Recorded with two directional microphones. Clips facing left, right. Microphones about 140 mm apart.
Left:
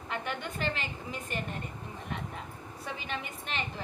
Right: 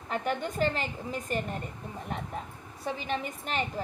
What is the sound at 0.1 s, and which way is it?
A woman's voice, 40° right (ahead or behind).